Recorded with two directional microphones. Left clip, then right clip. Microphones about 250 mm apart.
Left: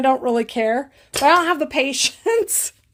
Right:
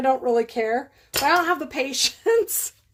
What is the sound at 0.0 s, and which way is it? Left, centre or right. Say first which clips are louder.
A woman's voice: left 2 dB; left.